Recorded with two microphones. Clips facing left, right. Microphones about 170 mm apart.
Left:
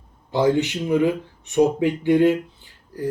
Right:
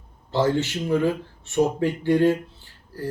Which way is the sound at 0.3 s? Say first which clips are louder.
Left 3 dB; 15° left (ahead or behind).